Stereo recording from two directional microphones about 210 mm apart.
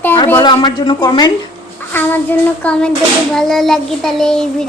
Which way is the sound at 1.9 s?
10° left (ahead or behind).